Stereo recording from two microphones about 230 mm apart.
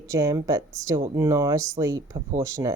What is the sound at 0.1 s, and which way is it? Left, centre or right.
A woman's voice, centre.